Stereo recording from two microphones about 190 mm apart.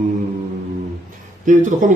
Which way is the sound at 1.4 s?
40° right (ahead or behind).